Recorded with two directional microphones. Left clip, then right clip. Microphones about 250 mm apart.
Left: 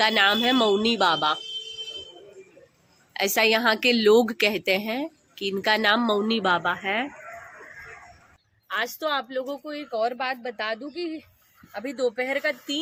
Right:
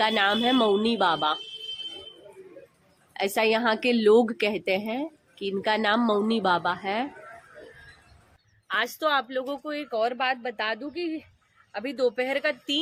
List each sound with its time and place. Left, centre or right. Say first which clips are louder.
0.0 s a woman's voice: left 3 dB; centre
3.1 s a woman's voice: left 3 dB; centre
8.6 s a woman's voice: right 1 dB; centre